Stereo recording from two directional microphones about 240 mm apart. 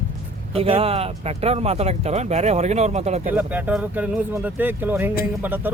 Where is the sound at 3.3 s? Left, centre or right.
Centre.